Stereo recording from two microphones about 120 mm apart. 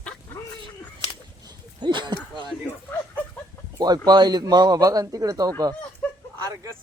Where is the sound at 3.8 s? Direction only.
35° right (ahead or behind).